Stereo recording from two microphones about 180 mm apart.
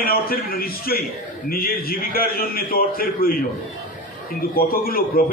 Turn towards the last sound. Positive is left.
turn(degrees=55)  # may be behind; listen again after turning